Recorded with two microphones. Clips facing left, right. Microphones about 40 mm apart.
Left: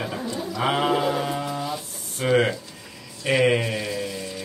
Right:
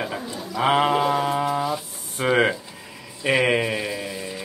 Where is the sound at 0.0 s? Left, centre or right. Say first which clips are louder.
Left 1 dB; centre.